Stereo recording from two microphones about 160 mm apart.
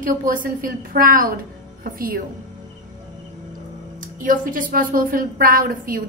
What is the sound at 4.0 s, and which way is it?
A woman's voice, 55° right (ahead or behind).